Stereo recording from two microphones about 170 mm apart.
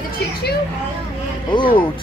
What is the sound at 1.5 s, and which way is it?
Speech, 30° left (ahead or behind).